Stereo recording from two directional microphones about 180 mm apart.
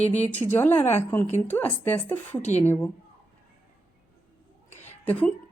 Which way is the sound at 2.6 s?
10° left (ahead or behind).